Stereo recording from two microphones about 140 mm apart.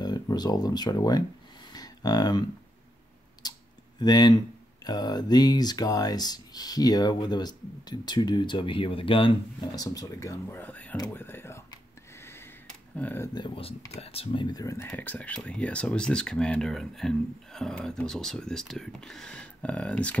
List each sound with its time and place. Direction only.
0.0 s a sound: 30° left (ahead or behind)
3.4 s clicking: 30° left (ahead or behind)
4.0 s speech: 30° left (ahead or behind)
9.8 s speech: 25° left (ahead or behind)
12.2 s a sound: 15° left (ahead or behind)
13.3 s speech: 35° left (ahead or behind); by 20.2 s 10° left (ahead or behind)